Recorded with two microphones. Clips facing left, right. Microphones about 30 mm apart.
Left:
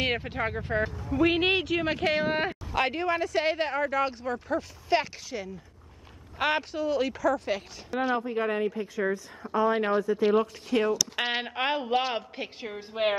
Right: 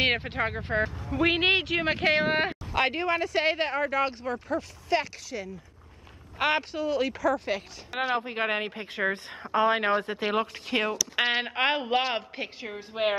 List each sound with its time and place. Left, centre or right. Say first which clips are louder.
0.0 s speech: right 3 dB; right
2.7 s speech: even; centre
4.8 s speech: left 1 dB; centre
6.3 s speech: right 1 dB; centre
8.0 s speech: even; right
11.1 s speech: right 3 dB; centre
12.5 s a woman's voice: left 2 dB; centre